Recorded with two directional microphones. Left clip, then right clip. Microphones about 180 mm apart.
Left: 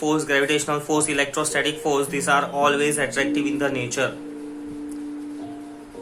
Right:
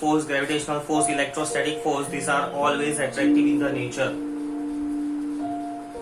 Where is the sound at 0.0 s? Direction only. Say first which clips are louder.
Left 2 dB; 25° left (ahead or behind).